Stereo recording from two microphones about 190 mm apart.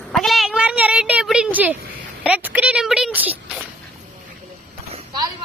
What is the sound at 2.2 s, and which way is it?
Speech, 5° right (ahead or behind).